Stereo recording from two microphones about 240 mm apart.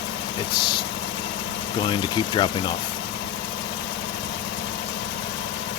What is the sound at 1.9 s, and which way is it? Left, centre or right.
Speech, centre.